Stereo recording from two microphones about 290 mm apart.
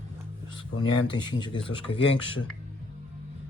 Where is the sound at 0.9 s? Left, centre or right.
Centre.